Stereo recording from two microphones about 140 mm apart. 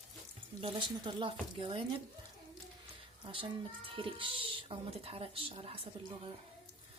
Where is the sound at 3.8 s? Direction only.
40° right (ahead or behind).